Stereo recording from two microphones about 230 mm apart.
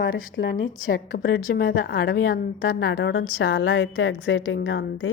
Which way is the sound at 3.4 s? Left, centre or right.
Left.